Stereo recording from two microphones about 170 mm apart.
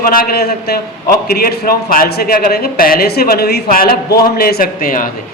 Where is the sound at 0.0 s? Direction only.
55° left (ahead or behind).